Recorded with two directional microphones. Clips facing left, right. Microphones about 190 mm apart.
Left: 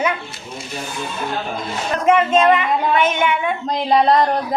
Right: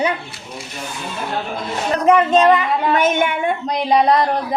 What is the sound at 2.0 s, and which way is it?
Speech, 35° right (ahead or behind).